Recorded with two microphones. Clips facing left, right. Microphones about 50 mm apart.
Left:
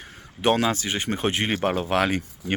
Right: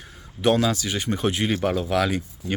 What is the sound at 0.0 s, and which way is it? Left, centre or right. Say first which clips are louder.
Speech: right 1 dB; left.